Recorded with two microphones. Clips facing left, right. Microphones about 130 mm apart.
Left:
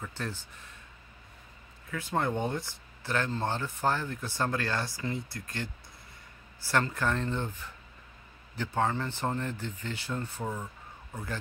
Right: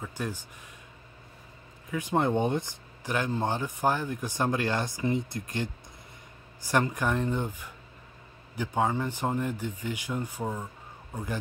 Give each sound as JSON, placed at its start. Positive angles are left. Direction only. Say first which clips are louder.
{"t": 0.0, "sound": "speech", "louder": "right 3 dB", "side_deg": -15}
{"t": 1.9, "sound": "speech", "louder": "right 4 dB", "side_deg": -15}